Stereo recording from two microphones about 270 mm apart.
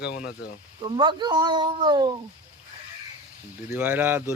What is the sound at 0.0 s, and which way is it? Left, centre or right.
Speech, left.